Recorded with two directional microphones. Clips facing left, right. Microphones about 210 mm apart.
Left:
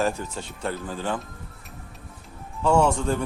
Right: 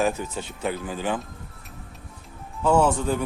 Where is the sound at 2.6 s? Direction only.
5° right (ahead or behind).